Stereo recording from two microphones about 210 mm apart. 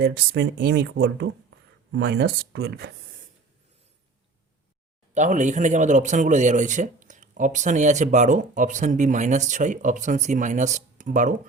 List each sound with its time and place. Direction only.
0.0 s speech: 50° right (ahead or behind)
5.1 s a man's voice: 35° right (ahead or behind)